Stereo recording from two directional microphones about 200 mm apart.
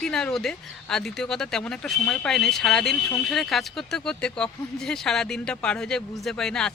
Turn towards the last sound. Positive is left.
turn(degrees=5)  # may be behind; listen again after turning